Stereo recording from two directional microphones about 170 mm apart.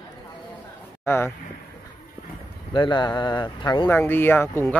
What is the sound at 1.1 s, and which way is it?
Speech, 15° left (ahead or behind).